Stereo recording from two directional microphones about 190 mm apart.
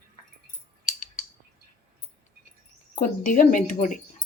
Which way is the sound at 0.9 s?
40° left (ahead or behind).